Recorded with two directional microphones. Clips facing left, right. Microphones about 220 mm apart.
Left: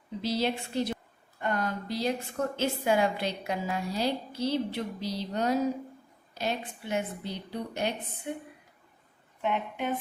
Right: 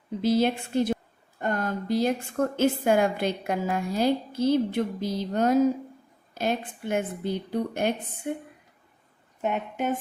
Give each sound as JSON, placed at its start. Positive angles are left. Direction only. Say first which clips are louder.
{"t": 0.2, "sound": "a woman's voice", "louder": "right 6 dB", "side_deg": -50}